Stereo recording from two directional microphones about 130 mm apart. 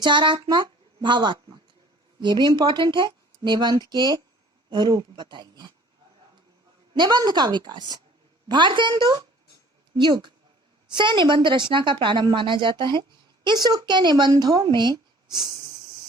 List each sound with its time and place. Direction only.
0.0 s a woman's voice: 35° right (ahead or behind)
6.9 s a woman's voice: 35° right (ahead or behind)